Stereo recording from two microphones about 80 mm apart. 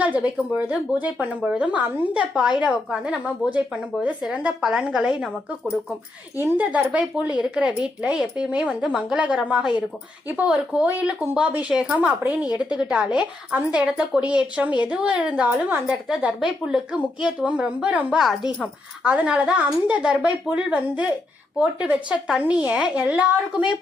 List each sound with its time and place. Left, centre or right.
0.0 s speech: centre
6.3 s speech: right
6.9 s speech: centre
16.0 s speech: centre
18.2 s speech: centre
19.0 s speech: centre